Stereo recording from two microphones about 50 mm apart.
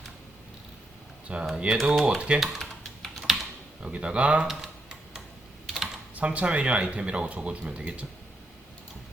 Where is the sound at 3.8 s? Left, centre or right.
Centre.